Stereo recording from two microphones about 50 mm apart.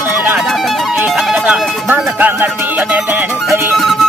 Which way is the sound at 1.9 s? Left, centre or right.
Right.